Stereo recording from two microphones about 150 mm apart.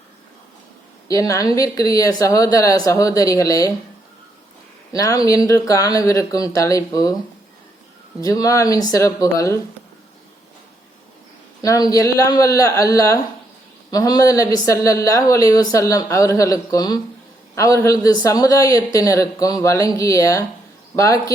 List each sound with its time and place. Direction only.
1.0 s a man's voice: 25° left (ahead or behind)
4.9 s a man's voice: 25° left (ahead or behind)
8.2 s a man's voice: 25° left (ahead or behind)
11.6 s a man's voice: 20° left (ahead or behind)